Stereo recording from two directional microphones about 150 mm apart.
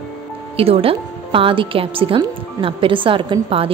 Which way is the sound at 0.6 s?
40° right (ahead or behind).